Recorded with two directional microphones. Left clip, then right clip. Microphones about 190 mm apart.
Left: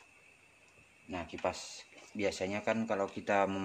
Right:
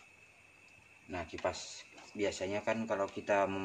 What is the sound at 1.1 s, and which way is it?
Speech, 35° left (ahead or behind).